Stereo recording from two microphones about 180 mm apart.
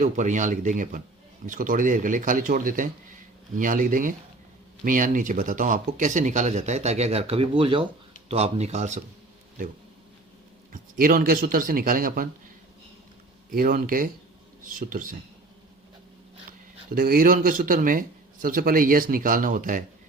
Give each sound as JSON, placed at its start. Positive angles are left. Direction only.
{"t": 0.0, "sound": "speech", "side_deg": -40}
{"t": 10.7, "sound": "speech", "side_deg": -50}
{"t": 13.5, "sound": "speech", "side_deg": -55}
{"t": 16.5, "sound": "speech", "side_deg": -55}